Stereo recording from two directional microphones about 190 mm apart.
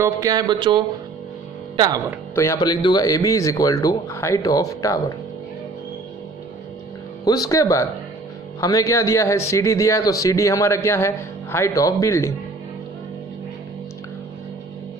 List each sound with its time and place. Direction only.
0.0 s speech: 20° right (ahead or behind)
2.3 s speech: 20° left (ahead or behind)
7.2 s speech: 20° left (ahead or behind)